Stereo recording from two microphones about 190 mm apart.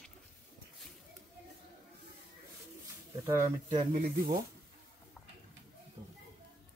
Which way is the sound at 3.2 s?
15° right (ahead or behind).